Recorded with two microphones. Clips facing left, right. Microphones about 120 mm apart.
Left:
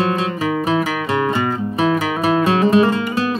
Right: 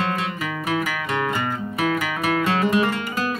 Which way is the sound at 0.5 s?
25° left (ahead or behind).